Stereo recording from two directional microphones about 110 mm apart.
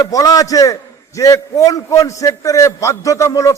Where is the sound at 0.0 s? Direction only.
35° left (ahead or behind).